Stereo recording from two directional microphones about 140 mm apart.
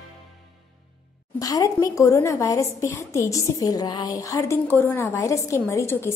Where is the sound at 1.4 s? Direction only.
25° left (ahead or behind).